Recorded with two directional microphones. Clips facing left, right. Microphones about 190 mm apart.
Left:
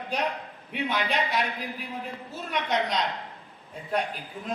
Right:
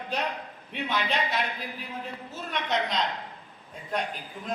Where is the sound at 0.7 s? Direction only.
15° left (ahead or behind).